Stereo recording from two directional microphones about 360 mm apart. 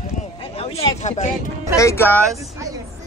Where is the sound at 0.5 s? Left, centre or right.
Centre.